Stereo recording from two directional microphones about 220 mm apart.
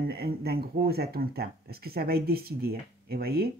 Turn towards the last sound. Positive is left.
turn(degrees=-45)  # may be behind; listen again after turning